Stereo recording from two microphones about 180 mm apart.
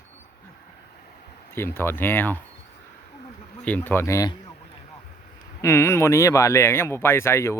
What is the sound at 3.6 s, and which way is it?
Speech, 10° left (ahead or behind).